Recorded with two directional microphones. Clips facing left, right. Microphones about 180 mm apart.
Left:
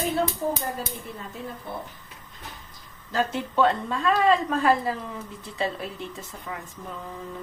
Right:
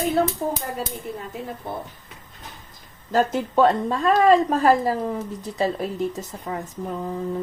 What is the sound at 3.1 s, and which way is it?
A woman's voice, 45° right (ahead or behind).